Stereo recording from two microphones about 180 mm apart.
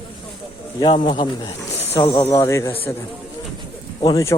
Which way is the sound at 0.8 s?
25° left (ahead or behind).